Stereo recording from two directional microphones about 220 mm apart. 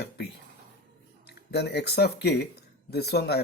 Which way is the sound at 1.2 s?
50° left (ahead or behind).